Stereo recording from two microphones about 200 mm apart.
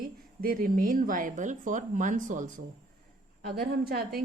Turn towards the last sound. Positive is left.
turn(degrees=-50)  # may be behind; listen again after turning